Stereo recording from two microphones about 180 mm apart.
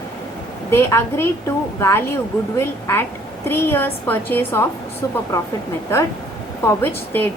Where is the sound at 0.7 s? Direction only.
15° left (ahead or behind).